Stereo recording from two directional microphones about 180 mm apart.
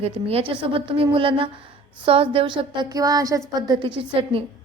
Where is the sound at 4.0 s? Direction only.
30° right (ahead or behind).